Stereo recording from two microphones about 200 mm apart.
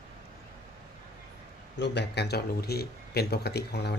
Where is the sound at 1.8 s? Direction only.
60° left (ahead or behind).